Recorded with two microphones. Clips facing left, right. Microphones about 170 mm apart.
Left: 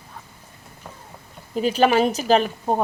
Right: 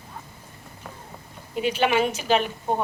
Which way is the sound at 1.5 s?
40° left (ahead or behind).